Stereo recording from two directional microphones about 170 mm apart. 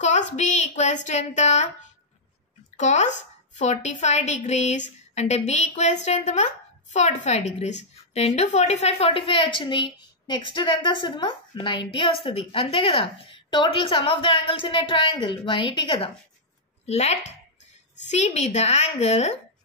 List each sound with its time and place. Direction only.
0.0 s speech: 45° left (ahead or behind)
2.8 s a woman's voice: 45° left (ahead or behind); by 16.1 s 30° left (ahead or behind)
16.8 s a woman's voice: 40° left (ahead or behind)